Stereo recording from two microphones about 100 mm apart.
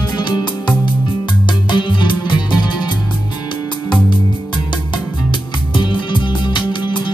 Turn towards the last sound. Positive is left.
turn(degrees=50)  # may be behind; listen again after turning